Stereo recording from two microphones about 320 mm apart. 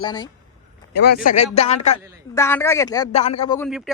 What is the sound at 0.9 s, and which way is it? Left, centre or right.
Speech, left.